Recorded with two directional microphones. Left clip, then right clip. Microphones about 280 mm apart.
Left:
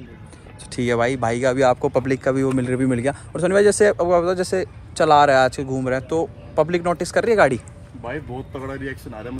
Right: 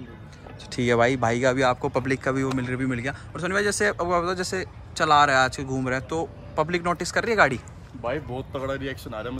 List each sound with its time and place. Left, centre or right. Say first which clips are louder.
0.7 s speech: left 1 dB; centre
8.0 s speech: right 1 dB; centre